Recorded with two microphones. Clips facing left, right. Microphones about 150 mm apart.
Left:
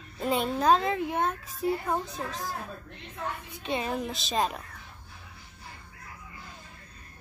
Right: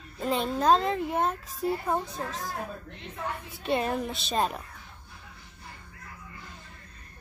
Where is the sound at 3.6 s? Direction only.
Centre (ahead or behind).